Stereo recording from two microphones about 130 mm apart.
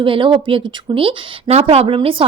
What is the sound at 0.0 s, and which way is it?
A woman's voice, 40° right (ahead or behind).